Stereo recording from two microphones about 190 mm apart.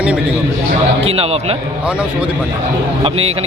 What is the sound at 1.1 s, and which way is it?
Speech, 30° right (ahead or behind).